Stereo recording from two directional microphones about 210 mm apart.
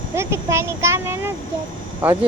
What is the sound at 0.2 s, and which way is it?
A child's voice, 10° right (ahead or behind).